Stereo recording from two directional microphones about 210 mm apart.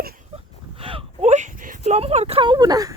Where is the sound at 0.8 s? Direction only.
25° right (ahead or behind).